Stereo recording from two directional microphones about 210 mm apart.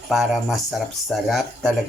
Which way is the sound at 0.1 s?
Centre (ahead or behind).